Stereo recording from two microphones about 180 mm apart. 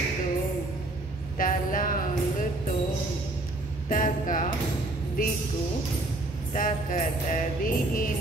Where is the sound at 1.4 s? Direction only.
50° left (ahead or behind).